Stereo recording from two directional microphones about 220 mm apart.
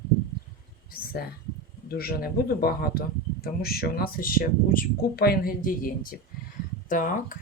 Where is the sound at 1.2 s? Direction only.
45° left (ahead or behind).